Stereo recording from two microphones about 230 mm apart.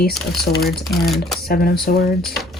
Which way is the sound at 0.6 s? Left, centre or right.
Centre.